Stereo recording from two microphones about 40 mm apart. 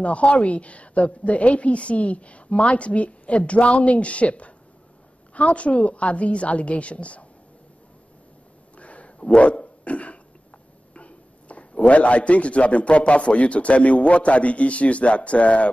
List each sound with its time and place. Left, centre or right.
0.0 s a man's voice: left
8.7 s a sound: left
11.0 s a man's voice: left